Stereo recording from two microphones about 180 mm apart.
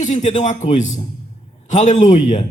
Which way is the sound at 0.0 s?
40° left (ahead or behind).